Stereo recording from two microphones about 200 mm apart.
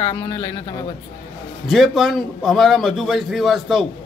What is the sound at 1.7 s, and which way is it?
A man's voice, centre (ahead or behind).